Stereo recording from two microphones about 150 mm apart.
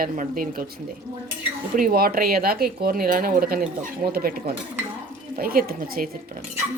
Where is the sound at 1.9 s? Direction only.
80° right.